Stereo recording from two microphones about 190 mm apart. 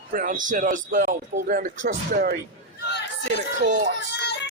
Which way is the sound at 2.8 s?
65° left (ahead or behind).